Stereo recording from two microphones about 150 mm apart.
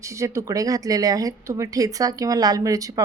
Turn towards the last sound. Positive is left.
turn(degrees=-20)  # may be behind; listen again after turning